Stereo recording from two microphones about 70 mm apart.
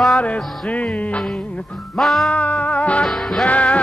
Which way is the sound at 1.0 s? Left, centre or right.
Centre.